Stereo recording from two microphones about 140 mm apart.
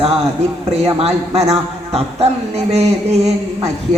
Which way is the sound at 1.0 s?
50° right (ahead or behind).